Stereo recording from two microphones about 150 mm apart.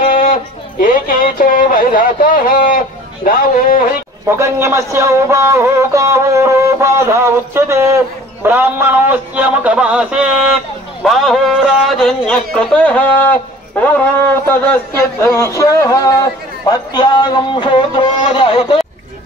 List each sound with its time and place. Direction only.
0.0 s a sound: 65° left (ahead or behind)
3.3 s speech: 65° left (ahead or behind)
4.3 s a man's voice: 20° right (ahead or behind); by 18.8 s 35° left (ahead or behind)